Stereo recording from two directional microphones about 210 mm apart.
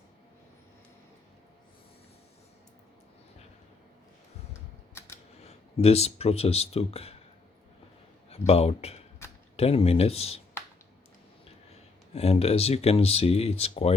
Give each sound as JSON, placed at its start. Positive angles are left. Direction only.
{"t": 5.5, "sound": "speech", "side_deg": 30}
{"t": 8.3, "sound": "a man's voice", "side_deg": 30}
{"t": 12.1, "sound": "speech", "side_deg": 30}